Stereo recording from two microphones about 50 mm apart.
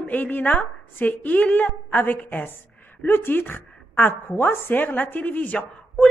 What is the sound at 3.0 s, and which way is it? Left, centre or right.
A woman's voice, left.